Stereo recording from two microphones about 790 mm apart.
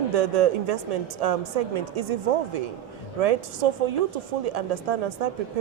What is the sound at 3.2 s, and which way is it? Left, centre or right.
A woman's voice, right.